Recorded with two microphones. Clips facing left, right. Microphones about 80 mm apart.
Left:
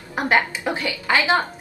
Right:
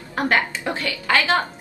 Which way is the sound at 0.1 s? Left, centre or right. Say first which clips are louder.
Left 1 dB; centre.